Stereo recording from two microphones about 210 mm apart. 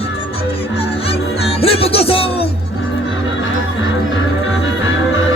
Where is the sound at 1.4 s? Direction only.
25° left (ahead or behind).